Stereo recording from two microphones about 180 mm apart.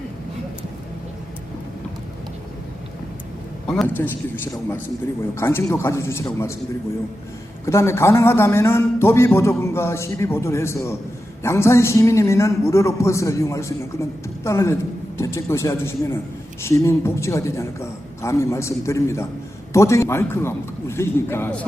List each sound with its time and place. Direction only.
3.7 s a man's voice: 5° left (ahead or behind)
5.3 s a man's voice: 15° left (ahead or behind)
7.6 s a man's voice: 15° left (ahead or behind)